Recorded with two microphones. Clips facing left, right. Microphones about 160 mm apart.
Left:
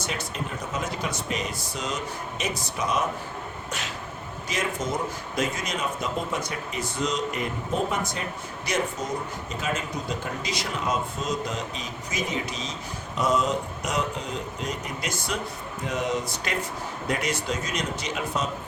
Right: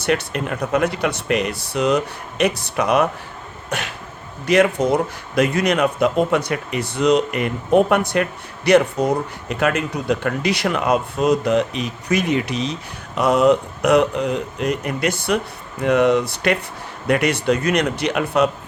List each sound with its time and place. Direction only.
0.0 s speech: 70° right (ahead or behind)
3.7 s a sound: 60° right (ahead or behind)
4.4 s speech: 65° right (ahead or behind)